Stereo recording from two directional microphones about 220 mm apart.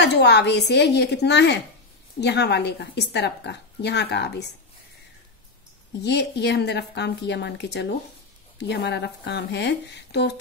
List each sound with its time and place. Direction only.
0.0 s a woman's voice: 50° left (ahead or behind)
5.9 s a woman's voice: 50° left (ahead or behind)